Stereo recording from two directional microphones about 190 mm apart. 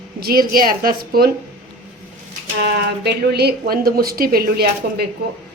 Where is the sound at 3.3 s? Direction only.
55° right (ahead or behind).